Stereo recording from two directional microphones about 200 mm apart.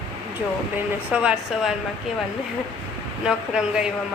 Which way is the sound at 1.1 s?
5° right (ahead or behind).